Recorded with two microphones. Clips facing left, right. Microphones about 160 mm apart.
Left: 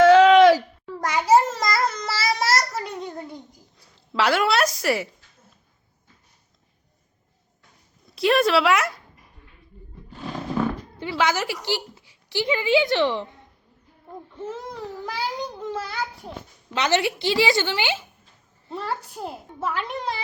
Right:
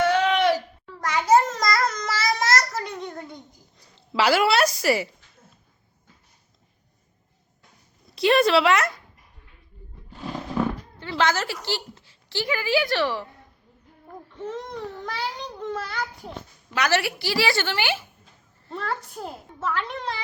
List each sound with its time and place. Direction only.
0.0 s groan: 90° left
1.0 s babbling: 10° left (ahead or behind)
3.3 s a sound: 5° left (ahead or behind)
8.1 s speech: centre (ahead or behind)
11.0 s a woman's voice: 10° left (ahead or behind)
14.3 s a sound: 5° left (ahead or behind)
16.7 s a woman's voice: 20° left (ahead or behind)
18.7 s a woman's voice: 5° left (ahead or behind)